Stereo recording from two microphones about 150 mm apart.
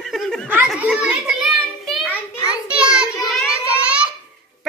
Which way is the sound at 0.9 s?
Centre (ahead or behind).